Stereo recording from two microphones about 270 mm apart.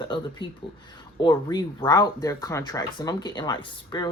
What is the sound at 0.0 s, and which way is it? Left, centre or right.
Speech, centre.